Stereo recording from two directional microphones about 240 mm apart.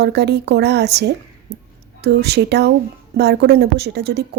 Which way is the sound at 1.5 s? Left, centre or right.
Right.